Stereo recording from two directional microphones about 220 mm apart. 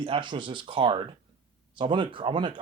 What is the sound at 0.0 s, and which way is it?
Speech, 20° right (ahead or behind).